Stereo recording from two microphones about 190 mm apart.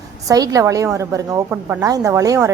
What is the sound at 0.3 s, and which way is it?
Speech, 20° right (ahead or behind).